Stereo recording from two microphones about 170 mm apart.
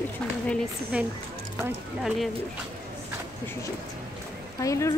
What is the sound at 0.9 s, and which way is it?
Speech, 5° right (ahead or behind).